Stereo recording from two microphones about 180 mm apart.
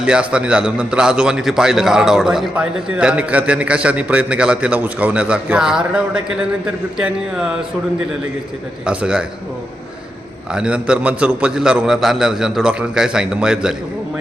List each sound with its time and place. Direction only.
0.0 s a man's voice: 5° right (ahead or behind)
8.9 s a man's voice: 5° right (ahead or behind)
10.5 s a man's voice: 5° right (ahead or behind)